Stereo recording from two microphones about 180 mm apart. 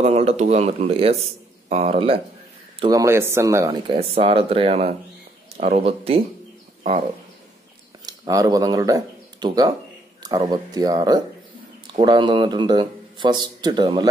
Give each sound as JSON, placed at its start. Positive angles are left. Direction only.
{"t": 0.0, "sound": "speech", "side_deg": -35}
{"t": 2.9, "sound": "speech", "side_deg": -15}
{"t": 4.2, "sound": "speech", "side_deg": -30}
{"t": 8.0, "sound": "speech", "side_deg": -20}